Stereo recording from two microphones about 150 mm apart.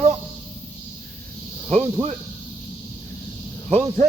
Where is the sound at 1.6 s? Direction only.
50° right (ahead or behind).